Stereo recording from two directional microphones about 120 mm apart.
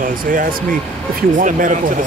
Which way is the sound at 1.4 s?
90° right.